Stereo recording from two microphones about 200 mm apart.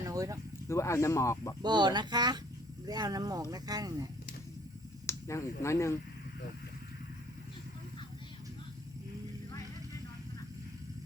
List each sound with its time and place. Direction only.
0.0 s a sound: 15° right (ahead or behind)
0.7 s speech: 15° left (ahead or behind)
1.6 s speech: 20° right (ahead or behind)
5.0 s speech: 15° left (ahead or behind)